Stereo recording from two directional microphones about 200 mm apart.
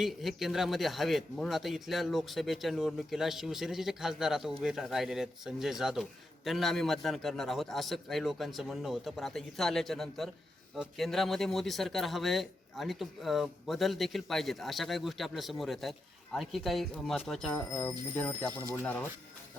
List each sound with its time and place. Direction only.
0.0 s a man's voice: centre (ahead or behind)